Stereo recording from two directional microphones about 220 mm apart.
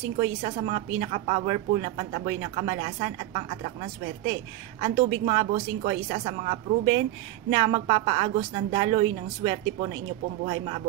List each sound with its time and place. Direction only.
0.2 s a woman's voice: 25° right (ahead or behind)